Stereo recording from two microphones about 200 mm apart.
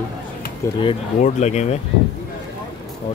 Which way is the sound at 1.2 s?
35° left (ahead or behind).